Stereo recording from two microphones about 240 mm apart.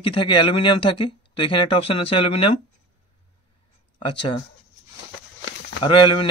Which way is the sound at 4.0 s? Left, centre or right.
Left.